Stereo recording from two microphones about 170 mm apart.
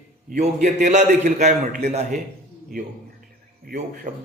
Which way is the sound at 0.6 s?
45° right (ahead or behind).